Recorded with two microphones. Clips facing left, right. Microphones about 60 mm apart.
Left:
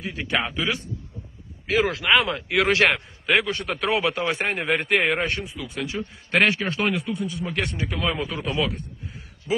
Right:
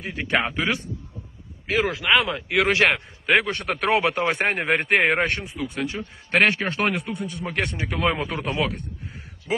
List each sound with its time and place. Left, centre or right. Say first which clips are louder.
0.0 s a man's voice: right 2 dB; right
1.9 s speech: even; centre
2.6 s speech: even; right
2.9 s speech: right 1 dB; centre
3.4 s a man's voice: right 2 dB; right
7.4 s a man's voice: right 4 dB; right